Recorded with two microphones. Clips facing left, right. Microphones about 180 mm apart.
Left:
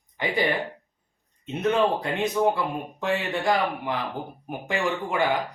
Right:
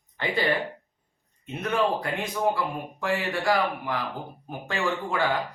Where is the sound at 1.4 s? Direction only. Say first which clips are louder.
Left 3 dB; 20° left (ahead or behind).